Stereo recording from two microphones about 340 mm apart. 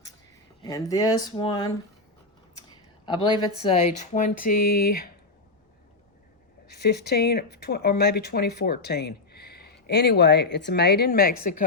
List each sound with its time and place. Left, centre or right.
0.6 s speech: centre
3.6 s speech: centre
6.7 s speech: left